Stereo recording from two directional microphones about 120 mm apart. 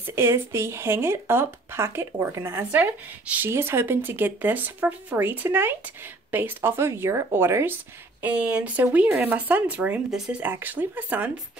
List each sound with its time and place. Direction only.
0.0 s speech: 20° right (ahead or behind)